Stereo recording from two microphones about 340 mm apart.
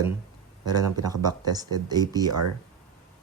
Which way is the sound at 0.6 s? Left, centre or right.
Centre.